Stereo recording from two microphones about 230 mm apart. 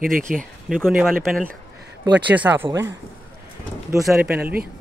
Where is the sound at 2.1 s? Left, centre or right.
Centre.